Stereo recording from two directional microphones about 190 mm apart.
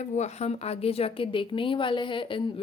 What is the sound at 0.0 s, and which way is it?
A woman's voice, 35° left (ahead or behind).